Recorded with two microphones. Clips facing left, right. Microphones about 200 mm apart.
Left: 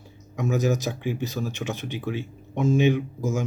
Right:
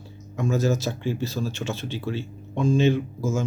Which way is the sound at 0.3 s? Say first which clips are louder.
Even; 15° left (ahead or behind).